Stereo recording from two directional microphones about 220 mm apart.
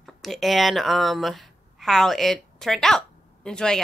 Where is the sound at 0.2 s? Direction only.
Centre (ahead or behind).